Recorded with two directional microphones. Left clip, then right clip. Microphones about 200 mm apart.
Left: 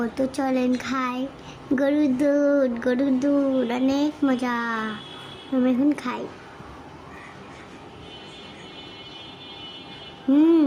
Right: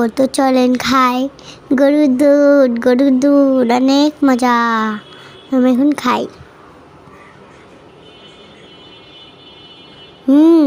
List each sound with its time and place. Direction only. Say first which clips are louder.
0.0 s a child's voice: right 12 dB; 30° right (ahead or behind)
10.3 s music: right 9 dB; 30° right (ahead or behind)